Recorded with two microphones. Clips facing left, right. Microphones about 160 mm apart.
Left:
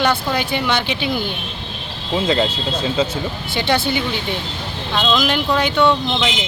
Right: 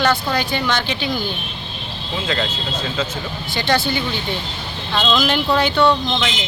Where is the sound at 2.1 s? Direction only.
30° left (ahead or behind).